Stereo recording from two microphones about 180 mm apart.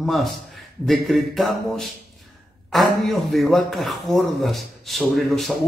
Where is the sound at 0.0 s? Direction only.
Centre (ahead or behind).